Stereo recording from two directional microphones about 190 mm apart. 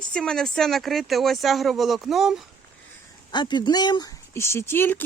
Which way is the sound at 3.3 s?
25° left (ahead or behind).